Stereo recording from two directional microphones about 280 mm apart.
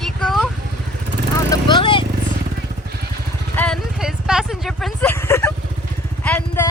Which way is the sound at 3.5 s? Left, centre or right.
Centre.